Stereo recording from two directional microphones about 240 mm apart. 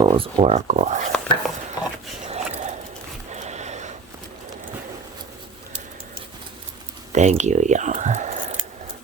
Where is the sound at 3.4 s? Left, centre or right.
Right.